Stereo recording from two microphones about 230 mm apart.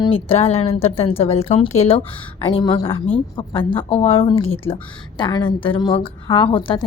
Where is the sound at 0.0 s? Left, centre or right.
Left.